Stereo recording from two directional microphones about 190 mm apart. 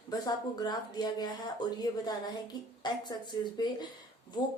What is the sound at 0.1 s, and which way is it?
Speech, 20° left (ahead or behind).